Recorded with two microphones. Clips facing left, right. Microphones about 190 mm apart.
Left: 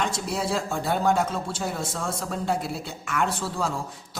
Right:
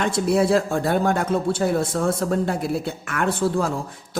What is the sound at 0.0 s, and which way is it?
Speech, 60° right (ahead or behind).